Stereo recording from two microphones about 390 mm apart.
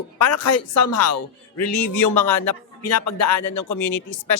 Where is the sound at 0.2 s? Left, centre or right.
Left.